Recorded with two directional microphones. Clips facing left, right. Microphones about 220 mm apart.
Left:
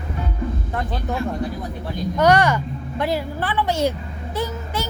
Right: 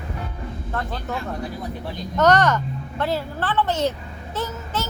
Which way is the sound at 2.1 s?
10° left (ahead or behind).